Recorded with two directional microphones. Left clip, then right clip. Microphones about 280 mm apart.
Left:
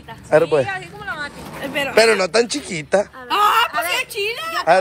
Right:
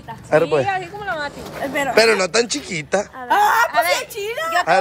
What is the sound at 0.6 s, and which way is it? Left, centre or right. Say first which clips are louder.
Speech: right 2 dB; right.